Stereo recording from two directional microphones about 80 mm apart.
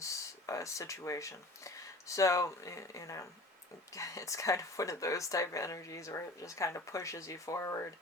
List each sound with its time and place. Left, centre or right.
0.0 s speech: left